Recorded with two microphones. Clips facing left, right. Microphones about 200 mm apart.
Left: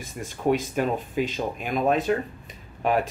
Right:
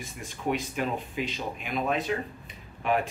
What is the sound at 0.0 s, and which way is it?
Speech, 45° left (ahead or behind).